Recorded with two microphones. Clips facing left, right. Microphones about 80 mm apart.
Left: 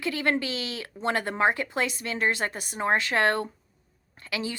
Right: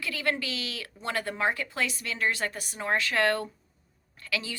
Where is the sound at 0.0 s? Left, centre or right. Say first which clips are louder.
Left 4 dB; left.